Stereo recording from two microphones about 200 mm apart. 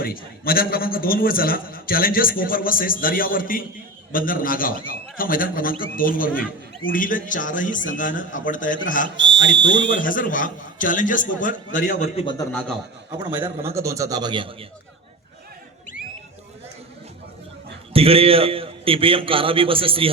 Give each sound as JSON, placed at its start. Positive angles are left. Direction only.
{"t": 0.0, "sound": "a man's voice", "side_deg": 50}
{"t": 9.1, "sound": "speech", "side_deg": -65}
{"t": 9.9, "sound": "a man's voice", "side_deg": 45}
{"t": 12.2, "sound": "a man's voice", "side_deg": 25}
{"t": 12.5, "sound": "a man's voice", "side_deg": 10}
{"t": 13.1, "sound": "a man's voice", "side_deg": -20}
{"t": 17.9, "sound": "a man's voice", "side_deg": -30}